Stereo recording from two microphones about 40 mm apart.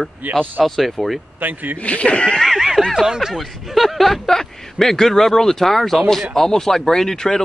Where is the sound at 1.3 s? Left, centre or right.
Right.